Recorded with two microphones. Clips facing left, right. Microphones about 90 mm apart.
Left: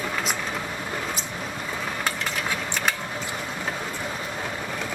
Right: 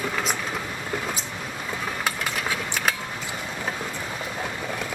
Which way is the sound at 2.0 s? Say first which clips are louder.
Right 1 dB; 5° right (ahead or behind).